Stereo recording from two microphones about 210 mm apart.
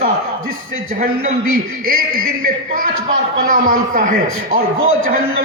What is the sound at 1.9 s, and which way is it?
A man's voice, 45° right (ahead or behind).